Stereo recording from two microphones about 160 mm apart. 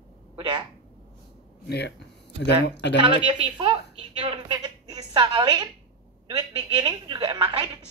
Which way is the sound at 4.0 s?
35° right (ahead or behind).